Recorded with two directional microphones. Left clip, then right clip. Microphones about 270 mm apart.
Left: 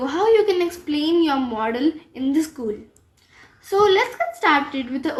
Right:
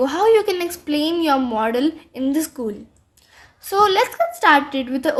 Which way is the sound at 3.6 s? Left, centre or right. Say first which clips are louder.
Right 1 dB; right.